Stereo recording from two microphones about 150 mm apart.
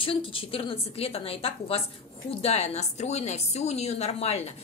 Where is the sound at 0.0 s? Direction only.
35° left (ahead or behind).